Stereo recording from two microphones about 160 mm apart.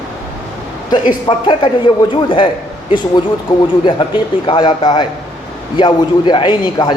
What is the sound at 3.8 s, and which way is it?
A man's voice, 30° left (ahead or behind).